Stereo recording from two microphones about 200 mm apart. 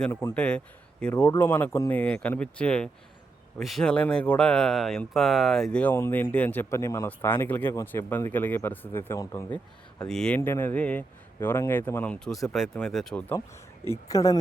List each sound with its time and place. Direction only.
0.0 s speech: 10° left (ahead or behind)